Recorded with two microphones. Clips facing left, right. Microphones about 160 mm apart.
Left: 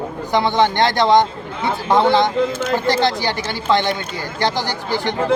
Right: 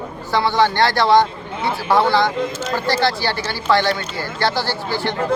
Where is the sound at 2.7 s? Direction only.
20° left (ahead or behind).